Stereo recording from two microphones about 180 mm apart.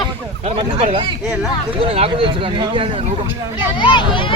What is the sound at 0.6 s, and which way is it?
Speech, 30° right (ahead or behind).